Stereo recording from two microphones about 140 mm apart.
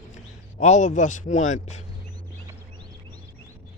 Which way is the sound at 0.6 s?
60° left (ahead or behind).